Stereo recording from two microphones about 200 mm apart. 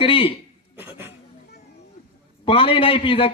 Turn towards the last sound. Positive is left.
turn(degrees=30)  # may be behind; listen again after turning